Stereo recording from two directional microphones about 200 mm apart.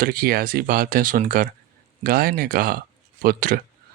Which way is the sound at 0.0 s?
50° right (ahead or behind).